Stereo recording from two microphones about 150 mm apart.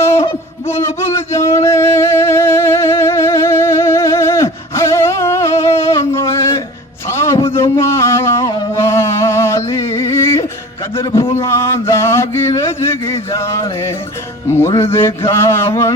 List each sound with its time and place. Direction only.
1.0 s music: 20° left (ahead or behind)
7.5 s a sound: 15° left (ahead or behind)
14.4 s music: 15° left (ahead or behind)
14.9 s mantra: 15° left (ahead or behind)